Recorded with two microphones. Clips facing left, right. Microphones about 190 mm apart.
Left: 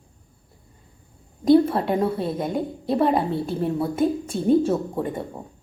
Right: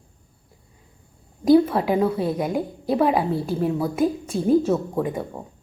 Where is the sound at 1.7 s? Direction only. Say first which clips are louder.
Right 2 dB; centre (ahead or behind).